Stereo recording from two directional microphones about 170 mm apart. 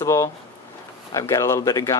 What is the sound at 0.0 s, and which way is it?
Speech, 20° left (ahead or behind).